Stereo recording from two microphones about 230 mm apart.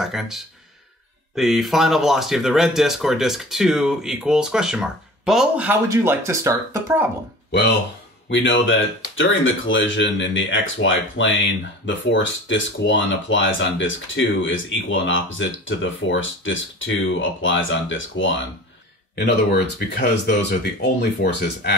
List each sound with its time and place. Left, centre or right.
0.0 s speech: centre
8.3 s speech: left